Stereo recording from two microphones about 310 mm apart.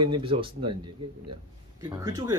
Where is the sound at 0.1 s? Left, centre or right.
Centre.